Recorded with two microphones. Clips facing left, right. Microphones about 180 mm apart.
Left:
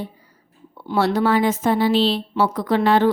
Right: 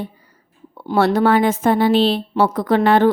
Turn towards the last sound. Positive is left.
turn(degrees=-50)  # may be behind; listen again after turning